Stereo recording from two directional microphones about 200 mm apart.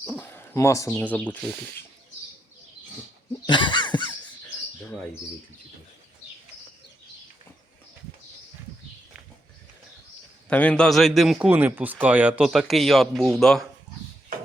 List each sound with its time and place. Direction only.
0.0 s speech: 10° left (ahead or behind)
3.4 s a sound: 25° left (ahead or behind)
10.5 s a man's voice: 5° left (ahead or behind)